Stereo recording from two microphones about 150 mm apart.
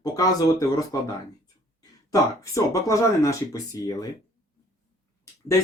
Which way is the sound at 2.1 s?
20° left (ahead or behind).